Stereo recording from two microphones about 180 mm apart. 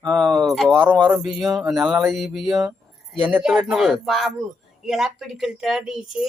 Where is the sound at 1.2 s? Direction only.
Centre (ahead or behind).